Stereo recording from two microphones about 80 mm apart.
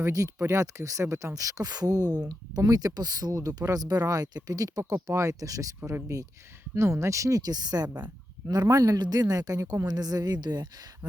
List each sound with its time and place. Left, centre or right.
0.0 s a woman's voice: right
8.0 s a sound: right
8.6 s a woman's voice: right